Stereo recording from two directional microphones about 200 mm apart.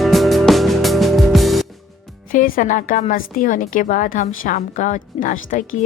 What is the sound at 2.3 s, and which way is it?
A woman's voice, 45° left (ahead or behind).